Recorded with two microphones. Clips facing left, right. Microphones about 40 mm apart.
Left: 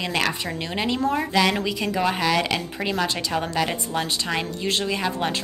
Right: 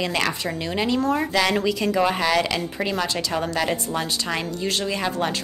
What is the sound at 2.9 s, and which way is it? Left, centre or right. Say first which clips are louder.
A woman's voice: left 2 dB; centre.